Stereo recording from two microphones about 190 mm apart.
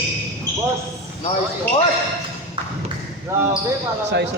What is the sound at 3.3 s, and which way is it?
Speech, 15° right (ahead or behind).